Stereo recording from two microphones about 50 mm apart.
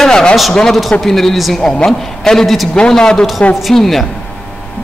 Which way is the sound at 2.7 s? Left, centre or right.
Centre.